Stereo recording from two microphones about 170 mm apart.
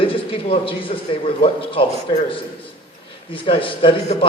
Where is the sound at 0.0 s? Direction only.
30° left (ahead or behind).